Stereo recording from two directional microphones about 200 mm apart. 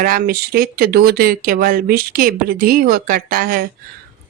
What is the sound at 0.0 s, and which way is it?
Speech, 45° right (ahead or behind).